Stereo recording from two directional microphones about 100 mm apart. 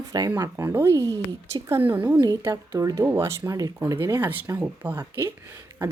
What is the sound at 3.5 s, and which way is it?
Speech, 40° right (ahead or behind).